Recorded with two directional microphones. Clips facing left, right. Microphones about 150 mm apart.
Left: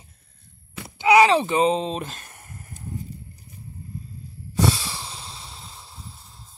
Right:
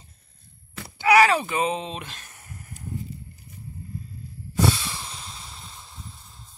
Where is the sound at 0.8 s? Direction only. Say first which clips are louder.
Left 2 dB; 20° left (ahead or behind); by 2.8 s 40° left (ahead or behind).